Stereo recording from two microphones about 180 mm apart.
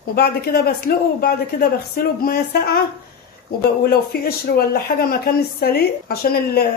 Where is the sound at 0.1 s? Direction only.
60° left (ahead or behind).